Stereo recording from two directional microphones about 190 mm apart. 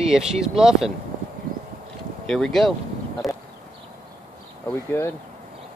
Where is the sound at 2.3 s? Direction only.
Centre (ahead or behind).